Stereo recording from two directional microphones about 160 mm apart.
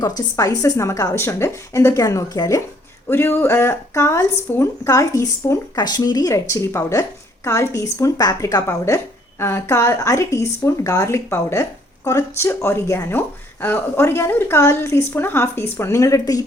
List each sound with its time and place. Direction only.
0.3 s a woman's voice: 20° left (ahead or behind)